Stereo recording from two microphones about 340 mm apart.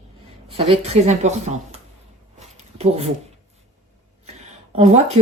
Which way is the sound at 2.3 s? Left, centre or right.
Centre.